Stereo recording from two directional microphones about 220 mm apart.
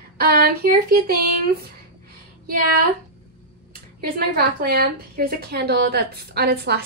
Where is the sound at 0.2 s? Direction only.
45° right (ahead or behind).